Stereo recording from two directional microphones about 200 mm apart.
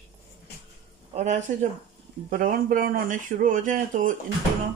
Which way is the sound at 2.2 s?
45° right (ahead or behind).